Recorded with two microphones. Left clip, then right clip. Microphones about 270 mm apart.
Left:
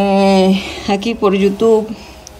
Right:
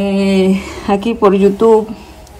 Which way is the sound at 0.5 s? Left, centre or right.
Centre.